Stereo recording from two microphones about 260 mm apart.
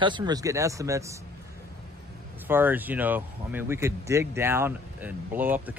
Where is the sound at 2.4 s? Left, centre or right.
Centre.